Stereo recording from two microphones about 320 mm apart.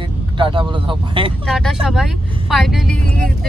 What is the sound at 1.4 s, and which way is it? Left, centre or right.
Speech, centre.